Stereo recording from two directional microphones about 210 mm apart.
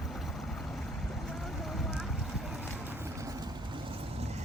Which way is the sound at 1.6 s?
Centre (ahead or behind).